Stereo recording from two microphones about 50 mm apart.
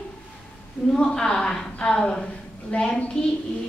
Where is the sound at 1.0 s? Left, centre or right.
Centre.